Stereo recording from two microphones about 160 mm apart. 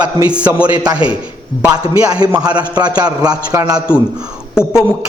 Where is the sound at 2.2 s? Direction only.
25° right (ahead or behind).